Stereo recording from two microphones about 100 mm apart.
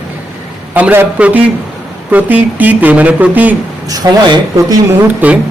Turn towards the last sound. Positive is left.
turn(degrees=-15)  # may be behind; listen again after turning